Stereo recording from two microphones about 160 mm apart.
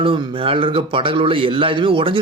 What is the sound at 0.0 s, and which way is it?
A man's voice, 35° right (ahead or behind).